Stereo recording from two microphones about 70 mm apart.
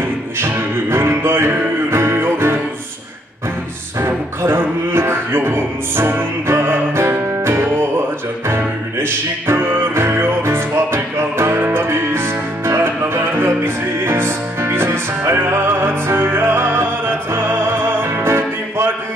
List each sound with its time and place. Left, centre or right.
0.4 s music: right
4.0 s music: right